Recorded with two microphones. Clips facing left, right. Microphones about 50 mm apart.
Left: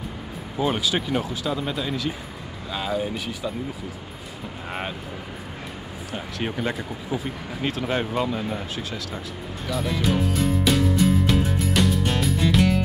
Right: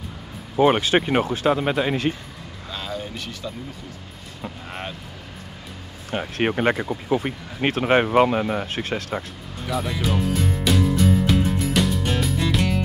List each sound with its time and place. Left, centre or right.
0.6 s speech: right
2.7 s speech: centre
6.1 s speech: right
9.7 s music: centre